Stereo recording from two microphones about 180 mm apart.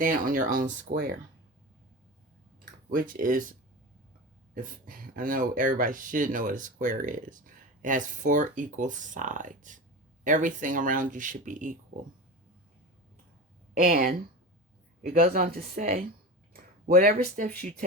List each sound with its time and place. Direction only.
0.0 s speech: 50° right (ahead or behind)
2.9 s speech: 50° right (ahead or behind)
4.5 s speech: 50° right (ahead or behind)
13.7 s speech: 55° right (ahead or behind)